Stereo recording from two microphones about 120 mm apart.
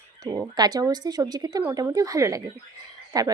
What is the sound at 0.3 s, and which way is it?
Speech, 35° right (ahead or behind).